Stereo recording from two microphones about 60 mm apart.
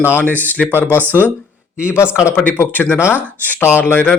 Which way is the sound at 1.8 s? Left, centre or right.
Left.